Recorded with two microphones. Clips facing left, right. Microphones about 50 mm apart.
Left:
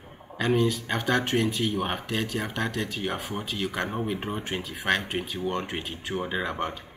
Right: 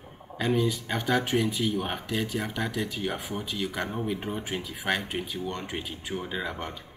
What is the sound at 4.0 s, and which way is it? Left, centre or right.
Speech, centre.